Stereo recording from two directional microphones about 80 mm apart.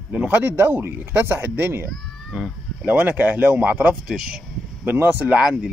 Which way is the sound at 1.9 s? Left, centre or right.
Centre.